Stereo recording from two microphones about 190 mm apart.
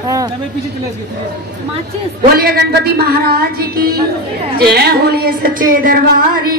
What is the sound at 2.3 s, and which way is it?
Music, 55° right (ahead or behind).